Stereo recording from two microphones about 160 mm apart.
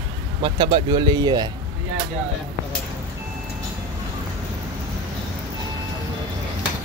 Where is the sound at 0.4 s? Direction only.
30° right (ahead or behind).